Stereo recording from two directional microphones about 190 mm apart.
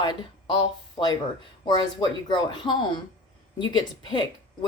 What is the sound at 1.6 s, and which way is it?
A woman's voice, 25° left (ahead or behind).